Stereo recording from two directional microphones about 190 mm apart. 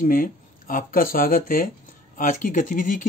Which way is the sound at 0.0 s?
45° left (ahead or behind).